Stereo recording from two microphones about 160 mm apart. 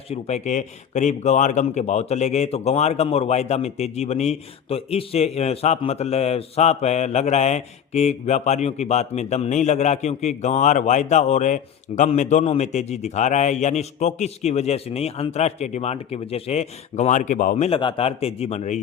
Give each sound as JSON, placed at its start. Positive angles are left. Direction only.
{"t": 0.1, "sound": "a man's voice", "side_deg": 45}
{"t": 17.7, "sound": "speech", "side_deg": 35}